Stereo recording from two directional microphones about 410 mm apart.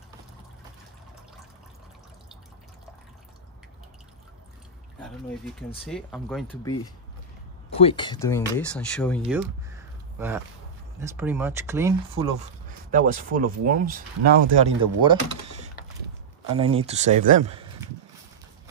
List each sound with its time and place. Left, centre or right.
5.9 s speech: centre
7.7 s speech: centre
9.3 s a sound: centre
11.0 s speech: centre; by 14.7 s right
16.4 s speech: centre